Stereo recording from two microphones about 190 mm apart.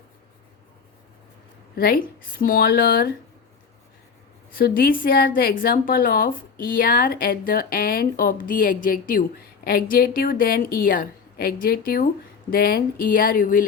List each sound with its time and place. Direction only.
1.7 s a woman's voice: 55° left (ahead or behind)
4.5 s a woman's voice: 50° left (ahead or behind)